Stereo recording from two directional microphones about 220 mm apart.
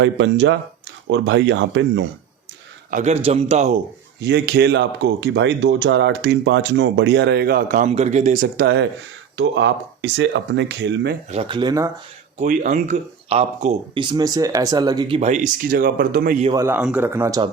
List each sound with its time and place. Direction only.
0.0 s speech: 55° right (ahead or behind)
2.9 s a man's voice: 30° right (ahead or behind)
4.2 s speech: 50° right (ahead or behind)
11.3 s a man's voice: 25° right (ahead or behind)
12.4 s speech: 35° right (ahead or behind)
16.5 s speech: 15° right (ahead or behind)